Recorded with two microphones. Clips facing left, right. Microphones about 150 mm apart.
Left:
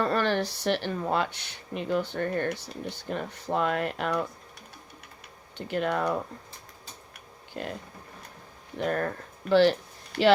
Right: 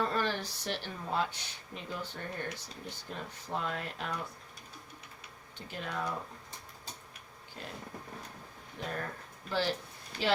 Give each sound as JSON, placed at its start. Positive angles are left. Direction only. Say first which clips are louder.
{"t": 0.0, "sound": "speech", "louder": "left 7 dB", "side_deg": 70}
{"t": 5.5, "sound": "speech", "louder": "left 11 dB", "side_deg": 70}
{"t": 8.8, "sound": "speech", "louder": "left 10 dB", "side_deg": 70}